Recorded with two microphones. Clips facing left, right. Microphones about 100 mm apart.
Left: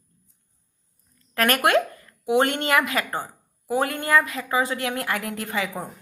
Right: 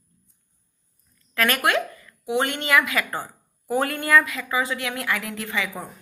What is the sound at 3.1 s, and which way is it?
Speech, 15° left (ahead or behind).